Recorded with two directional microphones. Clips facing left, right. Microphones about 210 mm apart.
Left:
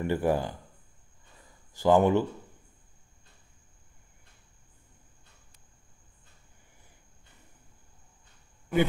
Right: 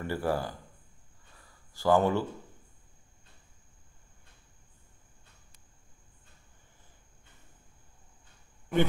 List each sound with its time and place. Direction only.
0.0 s speech: 20° left (ahead or behind)